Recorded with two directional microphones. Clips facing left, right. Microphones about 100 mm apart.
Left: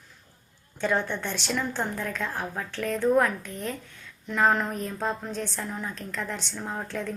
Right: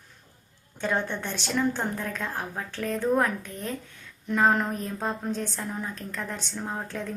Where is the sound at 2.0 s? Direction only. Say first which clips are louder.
Left 1 dB; 35° right (ahead or behind).